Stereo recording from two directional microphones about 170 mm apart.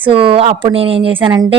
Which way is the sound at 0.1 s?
30° right (ahead or behind).